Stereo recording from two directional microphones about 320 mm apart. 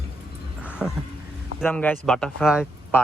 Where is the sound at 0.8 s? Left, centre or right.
Centre.